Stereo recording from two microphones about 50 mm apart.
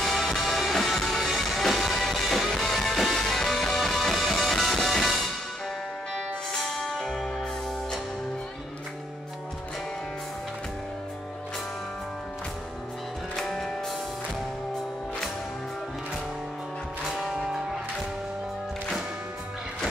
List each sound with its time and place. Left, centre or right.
0.0 s music: centre
6.6 s music: centre
13.4 s music: centre
17.1 s music: centre